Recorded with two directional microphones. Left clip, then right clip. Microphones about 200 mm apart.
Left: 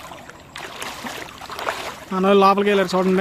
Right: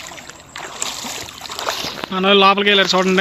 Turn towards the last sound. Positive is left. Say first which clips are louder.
# right 4 dB
turn(degrees=-5)  # may be behind; listen again after turning